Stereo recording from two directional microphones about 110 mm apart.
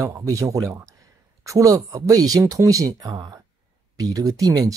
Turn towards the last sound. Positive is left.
turn(degrees=-35)  # may be behind; listen again after turning